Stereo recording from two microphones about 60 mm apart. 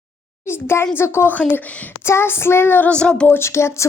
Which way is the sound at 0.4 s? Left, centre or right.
Left.